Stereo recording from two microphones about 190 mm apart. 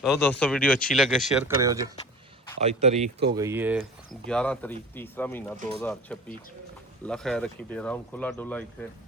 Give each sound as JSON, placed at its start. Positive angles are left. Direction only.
{"t": 0.2, "sound": "speech", "side_deg": 10}
{"t": 1.5, "sound": "speech", "side_deg": -15}
{"t": 2.6, "sound": "speech", "side_deg": -35}
{"t": 3.3, "sound": "speech", "side_deg": -15}
{"t": 4.3, "sound": "speech", "side_deg": 5}